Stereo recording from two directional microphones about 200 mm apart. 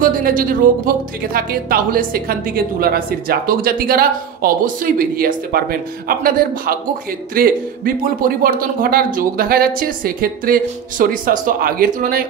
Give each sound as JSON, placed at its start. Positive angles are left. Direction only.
{"t": 0.0, "sound": "speech", "side_deg": -45}